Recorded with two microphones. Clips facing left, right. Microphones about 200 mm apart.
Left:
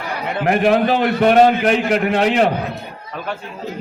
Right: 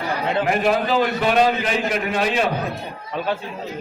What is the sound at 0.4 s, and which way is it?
A man's voice, 60° left (ahead or behind).